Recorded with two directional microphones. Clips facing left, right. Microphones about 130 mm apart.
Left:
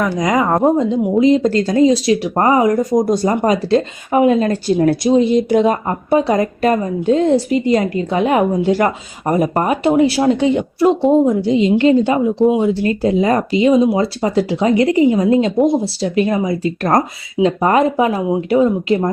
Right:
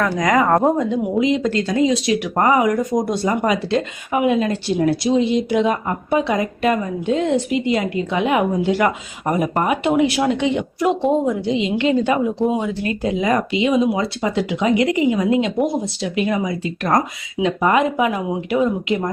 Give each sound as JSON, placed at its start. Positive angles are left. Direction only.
{"t": 0.0, "sound": "speech", "side_deg": 20}
{"t": 0.4, "sound": "a woman's voice", "side_deg": 0}
{"t": 0.8, "sound": "speech", "side_deg": 35}
{"t": 15.6, "sound": "speech", "side_deg": 25}
{"t": 16.0, "sound": "speech", "side_deg": 40}